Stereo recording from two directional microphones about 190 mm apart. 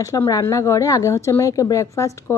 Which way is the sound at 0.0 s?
15° left (ahead or behind).